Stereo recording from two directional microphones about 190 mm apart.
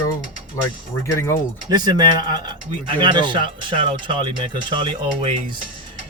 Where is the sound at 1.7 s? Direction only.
20° right (ahead or behind).